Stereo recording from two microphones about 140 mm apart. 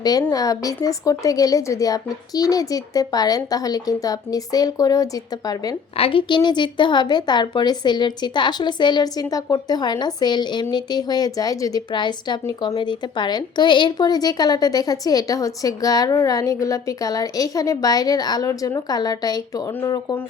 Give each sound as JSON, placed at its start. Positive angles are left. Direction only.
{"t": 0.0, "sound": "a woman's voice", "side_deg": 25}
{"t": 6.0, "sound": "a woman's voice", "side_deg": 40}